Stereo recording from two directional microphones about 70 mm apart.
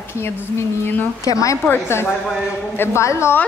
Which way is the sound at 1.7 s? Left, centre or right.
Left.